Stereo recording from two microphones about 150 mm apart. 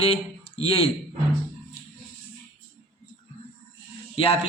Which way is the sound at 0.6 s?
40° left (ahead or behind).